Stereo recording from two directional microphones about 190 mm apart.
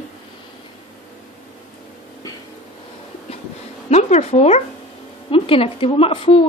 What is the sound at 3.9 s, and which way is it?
A woman's voice, 35° left (ahead or behind).